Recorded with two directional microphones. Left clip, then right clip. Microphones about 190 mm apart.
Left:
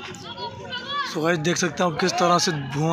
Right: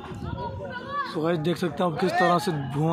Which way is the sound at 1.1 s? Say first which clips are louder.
Left 4 dB; 5° left (ahead or behind).